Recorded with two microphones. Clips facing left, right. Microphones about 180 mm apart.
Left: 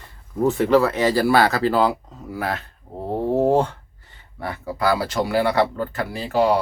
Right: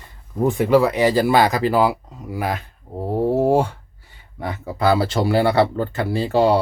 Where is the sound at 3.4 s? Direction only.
10° right (ahead or behind).